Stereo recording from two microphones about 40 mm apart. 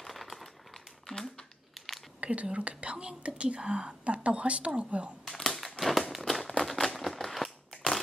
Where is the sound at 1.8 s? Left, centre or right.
Centre.